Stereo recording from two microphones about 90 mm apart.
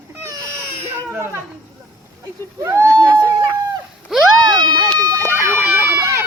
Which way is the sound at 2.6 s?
35° right (ahead or behind).